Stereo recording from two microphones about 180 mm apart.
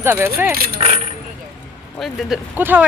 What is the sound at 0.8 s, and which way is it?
Coin, 30° right (ahead or behind).